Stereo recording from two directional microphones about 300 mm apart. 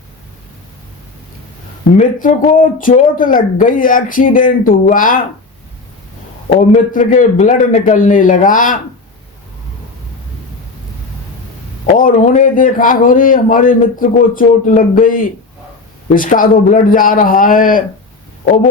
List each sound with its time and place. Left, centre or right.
2.0 s speech: left
6.5 s speech: left
11.9 s speech: left